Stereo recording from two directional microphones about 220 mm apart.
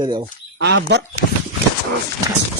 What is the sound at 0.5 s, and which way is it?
Speech, 55° right (ahead or behind).